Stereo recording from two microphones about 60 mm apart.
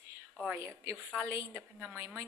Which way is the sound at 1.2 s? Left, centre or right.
Right.